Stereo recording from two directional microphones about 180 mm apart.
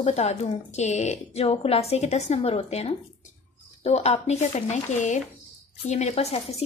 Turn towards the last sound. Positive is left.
turn(degrees=35)  # may be behind; listen again after turning